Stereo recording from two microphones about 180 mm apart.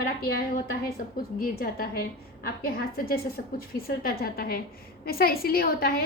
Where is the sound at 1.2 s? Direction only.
55° left (ahead or behind).